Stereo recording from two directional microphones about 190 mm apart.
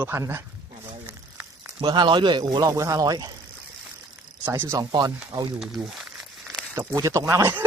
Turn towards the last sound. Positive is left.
turn(degrees=-15)  # may be behind; listen again after turning